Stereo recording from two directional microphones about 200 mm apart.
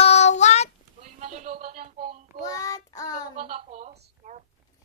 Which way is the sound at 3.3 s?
40° right (ahead or behind).